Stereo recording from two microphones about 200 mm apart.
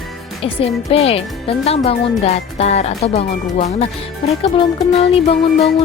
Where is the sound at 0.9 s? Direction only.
30° left (ahead or behind).